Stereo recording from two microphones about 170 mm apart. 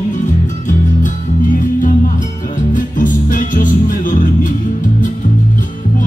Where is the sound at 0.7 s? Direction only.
50° left (ahead or behind).